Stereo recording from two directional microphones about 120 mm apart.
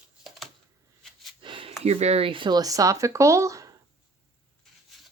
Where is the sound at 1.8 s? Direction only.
65° right (ahead or behind); by 3.8 s 30° right (ahead or behind).